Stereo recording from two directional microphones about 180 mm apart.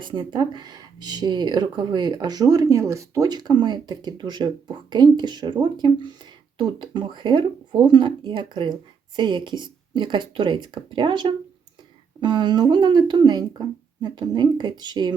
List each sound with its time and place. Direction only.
0.0 s speech: 25° right (ahead or behind)